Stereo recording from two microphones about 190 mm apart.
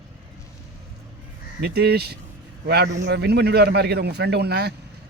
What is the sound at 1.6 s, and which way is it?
Speech, 60° right (ahead or behind).